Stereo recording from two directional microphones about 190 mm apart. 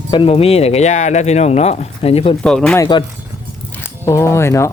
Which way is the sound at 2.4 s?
5° left (ahead or behind).